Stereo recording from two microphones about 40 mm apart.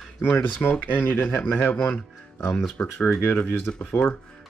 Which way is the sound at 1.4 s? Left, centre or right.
Left.